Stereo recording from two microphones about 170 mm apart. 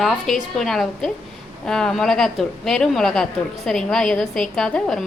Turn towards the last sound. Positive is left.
turn(degrees=5)  # may be behind; listen again after turning